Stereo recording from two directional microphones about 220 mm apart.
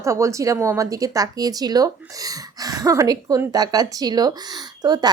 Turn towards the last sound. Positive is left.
turn(degrees=-20)  # may be behind; listen again after turning